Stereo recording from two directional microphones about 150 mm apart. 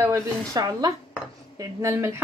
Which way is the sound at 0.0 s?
20° right (ahead or behind).